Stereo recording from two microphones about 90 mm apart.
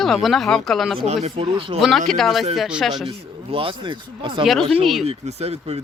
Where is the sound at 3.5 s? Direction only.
80° right.